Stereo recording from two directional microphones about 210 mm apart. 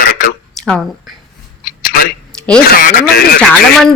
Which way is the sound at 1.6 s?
45° left (ahead or behind).